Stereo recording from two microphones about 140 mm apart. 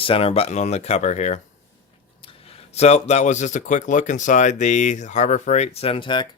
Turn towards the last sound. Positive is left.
turn(degrees=35)  # may be behind; listen again after turning